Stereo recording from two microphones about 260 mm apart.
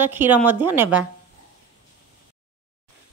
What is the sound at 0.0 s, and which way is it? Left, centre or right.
A woman's voice, centre.